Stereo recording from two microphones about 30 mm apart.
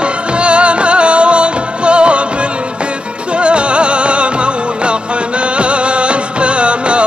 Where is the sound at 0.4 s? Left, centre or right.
Right.